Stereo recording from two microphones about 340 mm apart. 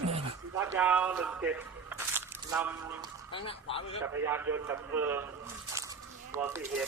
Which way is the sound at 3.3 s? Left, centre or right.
Centre.